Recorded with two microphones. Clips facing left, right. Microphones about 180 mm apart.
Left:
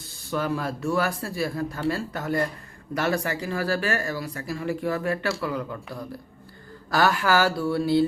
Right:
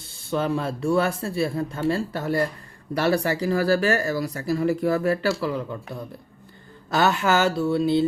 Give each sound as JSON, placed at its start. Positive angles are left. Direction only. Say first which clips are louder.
{"t": 0.3, "sound": "speech", "louder": "right 3 dB", "side_deg": -25}